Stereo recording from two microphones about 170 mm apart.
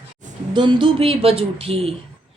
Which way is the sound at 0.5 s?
25° right (ahead or behind).